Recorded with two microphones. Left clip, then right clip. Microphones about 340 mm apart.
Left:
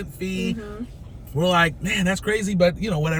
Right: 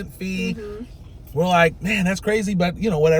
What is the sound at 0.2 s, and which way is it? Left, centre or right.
Speech, centre.